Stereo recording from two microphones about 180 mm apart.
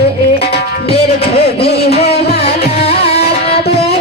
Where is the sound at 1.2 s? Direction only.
65° left (ahead or behind).